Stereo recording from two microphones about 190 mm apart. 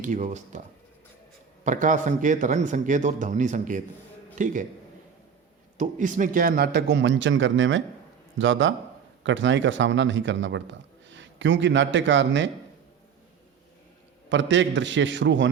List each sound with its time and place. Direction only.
0.0 s a man's voice: 40° right (ahead or behind)
1.6 s a man's voice: 40° right (ahead or behind)
5.7 s a man's voice: 40° right (ahead or behind); by 12.5 s 75° right (ahead or behind)
14.3 s a man's voice: 75° right (ahead or behind)